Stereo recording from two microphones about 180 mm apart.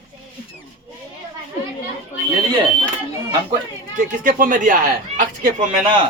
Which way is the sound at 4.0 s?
50° right (ahead or behind).